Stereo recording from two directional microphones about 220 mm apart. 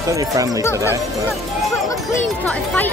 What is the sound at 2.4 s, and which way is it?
Speech, 5° left (ahead or behind).